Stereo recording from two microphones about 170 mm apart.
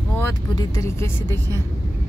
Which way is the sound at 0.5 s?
20° left (ahead or behind).